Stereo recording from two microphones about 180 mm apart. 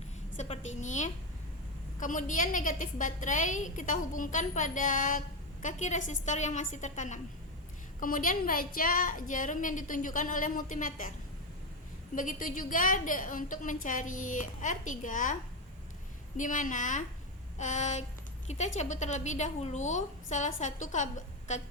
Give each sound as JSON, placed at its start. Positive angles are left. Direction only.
{"t": 0.3, "sound": "a woman's voice", "side_deg": 35}
{"t": 12.1, "sound": "a woman's voice", "side_deg": 45}
{"t": 16.4, "sound": "a woman's voice", "side_deg": 45}